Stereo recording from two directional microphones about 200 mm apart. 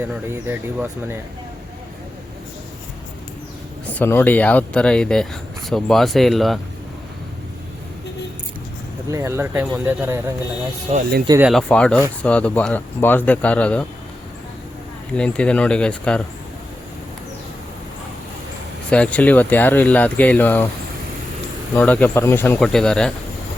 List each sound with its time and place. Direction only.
0.1 s speech: 10° right (ahead or behind)
3.9 s speech: 10° left (ahead or behind)
9.0 s speech: 15° right (ahead or behind)
10.9 s speech: 30° right (ahead or behind)
11.3 s speech: 10° right (ahead or behind)
11.5 s speech: 5° left (ahead or behind)
15.1 s speech: 5° left (ahead or behind)
18.9 s speech: 5° left (ahead or behind)
21.8 s speech: 5° left (ahead or behind)